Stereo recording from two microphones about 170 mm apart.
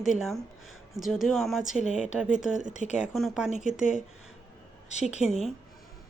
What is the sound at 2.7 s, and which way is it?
Speech, 45° left (ahead or behind).